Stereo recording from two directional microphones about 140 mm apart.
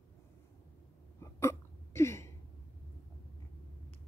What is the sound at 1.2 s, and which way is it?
Hiccup, 20° left (ahead or behind).